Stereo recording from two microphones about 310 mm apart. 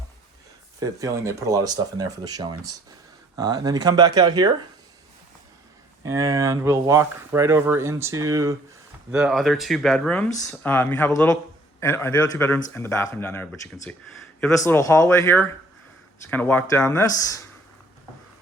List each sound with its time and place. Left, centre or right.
0.8 s speech: centre
6.0 s speech: centre
9.1 s speech: centre